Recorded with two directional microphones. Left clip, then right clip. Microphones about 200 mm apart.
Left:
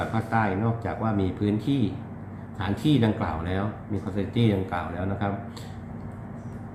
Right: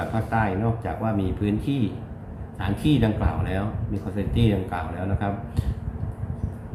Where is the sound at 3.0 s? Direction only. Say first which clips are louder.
Right 1 dB; 10° right (ahead or behind).